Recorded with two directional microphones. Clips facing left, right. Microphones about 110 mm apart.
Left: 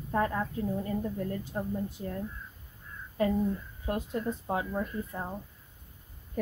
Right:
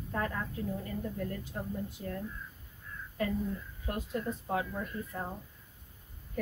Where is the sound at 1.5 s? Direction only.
30° left (ahead or behind).